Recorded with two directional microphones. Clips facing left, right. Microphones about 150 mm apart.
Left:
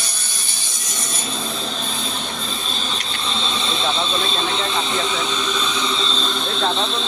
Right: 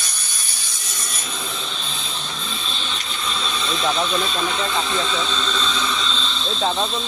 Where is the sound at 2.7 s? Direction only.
40° left (ahead or behind); by 6.6 s 55° left (ahead or behind).